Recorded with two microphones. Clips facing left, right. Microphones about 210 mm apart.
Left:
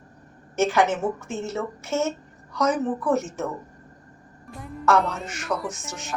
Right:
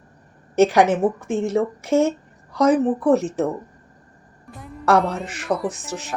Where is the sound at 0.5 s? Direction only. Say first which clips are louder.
Right 6 dB; 35° right (ahead or behind).